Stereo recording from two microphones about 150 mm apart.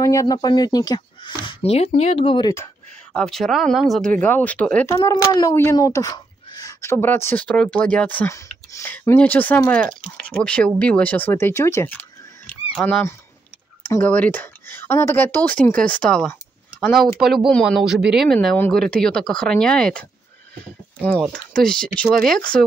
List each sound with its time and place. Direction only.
0.0 s speech: 20° left (ahead or behind)
2.5 s a sound: 15° left (ahead or behind)
3.2 s speech: centre (ahead or behind)
4.1 s speech: 10° left (ahead or behind)
17.5 s speech: centre (ahead or behind)
21.2 s speech: 5° left (ahead or behind)